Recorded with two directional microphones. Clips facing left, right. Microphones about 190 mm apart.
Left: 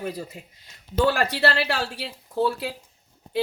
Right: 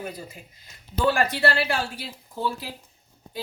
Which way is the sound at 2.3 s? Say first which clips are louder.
Left 6 dB; 70° left (ahead or behind).